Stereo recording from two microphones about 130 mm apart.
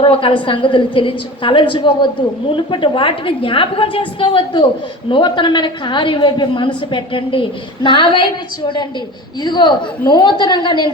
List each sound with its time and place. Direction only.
0.0 s a woman's voice: 45° left (ahead or behind)
9.4 s a woman's voice: 35° left (ahead or behind)